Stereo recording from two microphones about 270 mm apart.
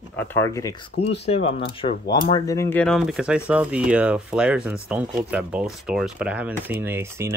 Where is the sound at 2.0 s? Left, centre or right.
Left.